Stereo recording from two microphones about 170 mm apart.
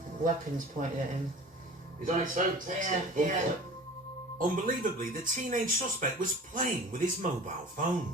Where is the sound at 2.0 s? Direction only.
50° right (ahead or behind).